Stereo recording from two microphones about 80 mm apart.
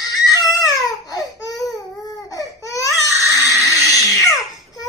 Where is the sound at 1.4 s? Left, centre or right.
Left.